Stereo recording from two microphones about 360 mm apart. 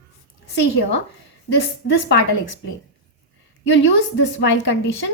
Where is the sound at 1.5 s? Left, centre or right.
Left.